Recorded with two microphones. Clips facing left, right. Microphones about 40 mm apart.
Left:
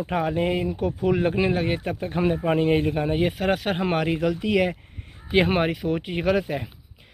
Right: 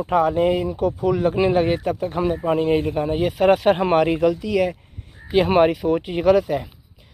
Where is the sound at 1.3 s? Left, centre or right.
Centre.